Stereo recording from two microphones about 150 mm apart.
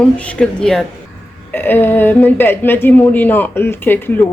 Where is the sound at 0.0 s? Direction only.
5° left (ahead or behind).